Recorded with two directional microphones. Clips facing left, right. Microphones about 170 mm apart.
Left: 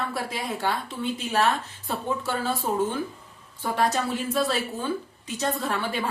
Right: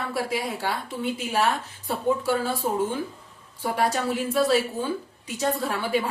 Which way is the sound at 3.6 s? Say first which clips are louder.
Even; 10° right (ahead or behind).